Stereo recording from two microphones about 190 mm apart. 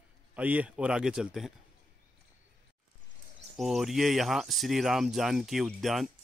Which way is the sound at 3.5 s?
Centre (ahead or behind).